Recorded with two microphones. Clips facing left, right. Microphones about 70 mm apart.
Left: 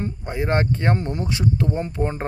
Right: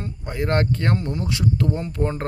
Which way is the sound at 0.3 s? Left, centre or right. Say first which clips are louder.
Even; centre.